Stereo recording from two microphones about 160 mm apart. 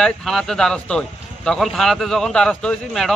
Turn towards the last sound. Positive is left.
turn(degrees=5)  # may be behind; listen again after turning